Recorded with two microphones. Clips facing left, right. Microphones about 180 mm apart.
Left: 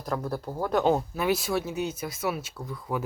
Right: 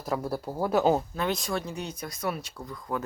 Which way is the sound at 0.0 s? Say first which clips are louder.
Right 1 dB; 5° right (ahead or behind).